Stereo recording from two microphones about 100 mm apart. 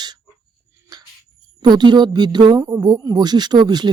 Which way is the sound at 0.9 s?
45° right (ahead or behind).